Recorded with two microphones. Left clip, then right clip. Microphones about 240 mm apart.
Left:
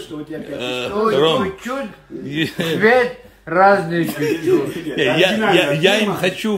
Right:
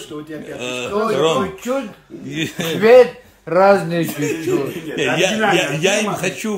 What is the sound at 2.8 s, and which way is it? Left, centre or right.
A man's voice, right.